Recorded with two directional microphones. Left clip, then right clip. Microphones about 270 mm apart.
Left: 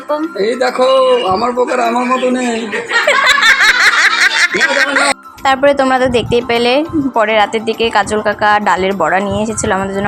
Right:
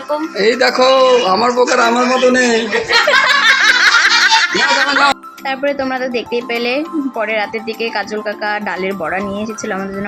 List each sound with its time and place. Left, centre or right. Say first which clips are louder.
0.3 s a man's voice: right 3 dB; right
3.1 s snicker: left 3 dB; centre
7.9 s speech: left 7 dB; centre